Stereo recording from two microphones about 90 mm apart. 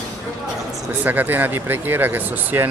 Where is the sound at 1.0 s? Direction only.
20° right (ahead or behind).